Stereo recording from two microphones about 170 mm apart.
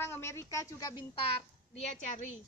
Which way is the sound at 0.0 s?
15° left (ahead or behind).